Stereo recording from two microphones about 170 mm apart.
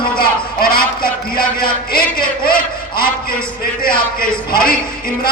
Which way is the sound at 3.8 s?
55° left (ahead or behind).